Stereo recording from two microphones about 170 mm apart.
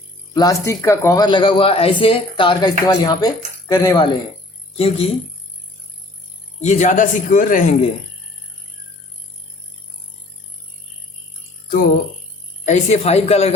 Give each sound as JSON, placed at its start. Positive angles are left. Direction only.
{"t": 0.3, "sound": "speech", "side_deg": 20}
{"t": 4.8, "sound": "speech", "side_deg": 35}
{"t": 6.6, "sound": "speech", "side_deg": 45}
{"t": 12.6, "sound": "speech", "side_deg": 40}